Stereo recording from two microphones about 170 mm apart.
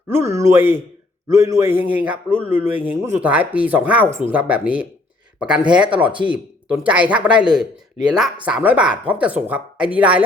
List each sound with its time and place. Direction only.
0.1 s a man's voice: 15° right (ahead or behind)